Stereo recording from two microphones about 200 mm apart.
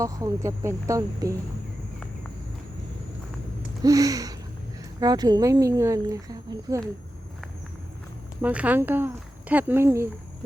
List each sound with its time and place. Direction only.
0.0 s speech: 15° right (ahead or behind)
3.8 s speech: 15° right (ahead or behind)
8.4 s speech: 10° right (ahead or behind)